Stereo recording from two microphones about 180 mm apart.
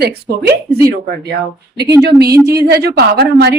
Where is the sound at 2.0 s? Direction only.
65° right (ahead or behind).